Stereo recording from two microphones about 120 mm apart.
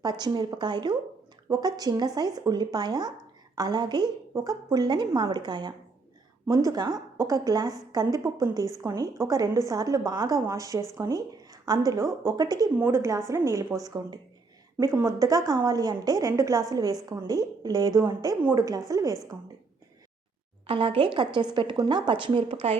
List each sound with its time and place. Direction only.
0.0 s a woman's voice: 35° right (ahead or behind)
20.7 s a woman's voice: 45° right (ahead or behind)